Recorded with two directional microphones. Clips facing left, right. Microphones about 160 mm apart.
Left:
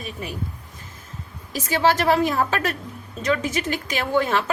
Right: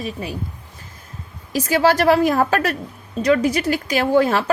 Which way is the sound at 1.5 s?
40° right (ahead or behind).